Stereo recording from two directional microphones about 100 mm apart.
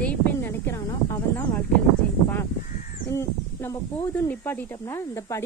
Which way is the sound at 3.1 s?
30° left (ahead or behind).